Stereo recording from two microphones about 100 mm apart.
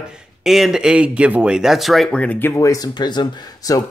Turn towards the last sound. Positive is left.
turn(degrees=40)  # may be behind; listen again after turning